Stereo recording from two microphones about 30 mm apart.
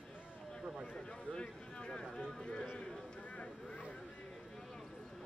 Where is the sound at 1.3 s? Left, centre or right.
Left.